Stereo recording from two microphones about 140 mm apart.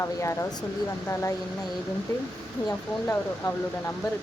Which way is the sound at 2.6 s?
15° left (ahead or behind).